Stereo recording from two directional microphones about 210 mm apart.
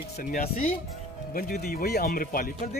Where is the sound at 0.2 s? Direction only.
45° left (ahead or behind).